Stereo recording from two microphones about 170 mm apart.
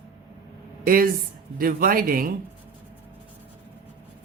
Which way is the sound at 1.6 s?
60° right (ahead or behind).